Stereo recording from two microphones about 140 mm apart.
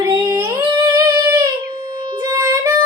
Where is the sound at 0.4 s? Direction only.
15° right (ahead or behind).